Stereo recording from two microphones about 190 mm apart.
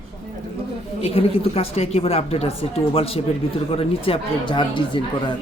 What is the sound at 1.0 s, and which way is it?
Speech, 30° left (ahead or behind).